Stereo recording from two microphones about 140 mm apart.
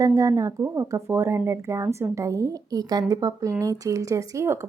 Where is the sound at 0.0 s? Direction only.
25° right (ahead or behind).